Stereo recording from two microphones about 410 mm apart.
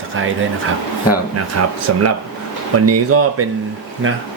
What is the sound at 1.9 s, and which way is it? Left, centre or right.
Speech, right.